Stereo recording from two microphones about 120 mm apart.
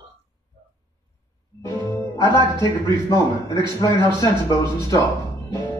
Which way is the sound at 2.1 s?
40° right (ahead or behind).